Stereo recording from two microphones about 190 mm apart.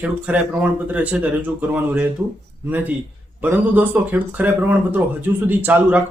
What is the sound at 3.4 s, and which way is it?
Speech, 10° right (ahead or behind).